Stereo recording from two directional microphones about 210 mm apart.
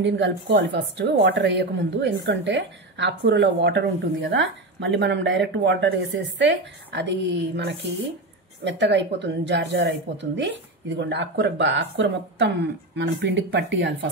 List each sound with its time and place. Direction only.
0.0 s a woman's voice: 60° right (ahead or behind)
12.9 s a woman's voice: 60° right (ahead or behind)